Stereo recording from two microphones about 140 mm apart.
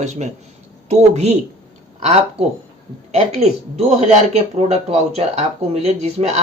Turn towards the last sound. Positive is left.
turn(degrees=-50)  # may be behind; listen again after turning